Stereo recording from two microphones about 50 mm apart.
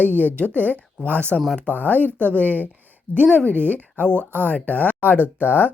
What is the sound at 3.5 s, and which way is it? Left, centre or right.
A woman's voice, right.